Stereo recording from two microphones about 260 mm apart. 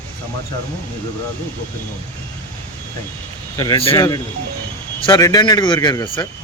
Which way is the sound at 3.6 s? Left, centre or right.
Centre.